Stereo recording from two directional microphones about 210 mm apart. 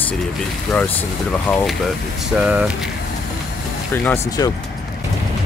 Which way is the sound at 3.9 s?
15° left (ahead or behind).